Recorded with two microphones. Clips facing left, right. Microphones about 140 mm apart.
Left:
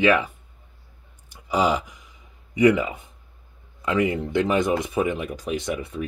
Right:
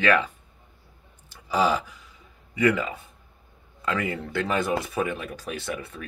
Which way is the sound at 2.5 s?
15° left (ahead or behind).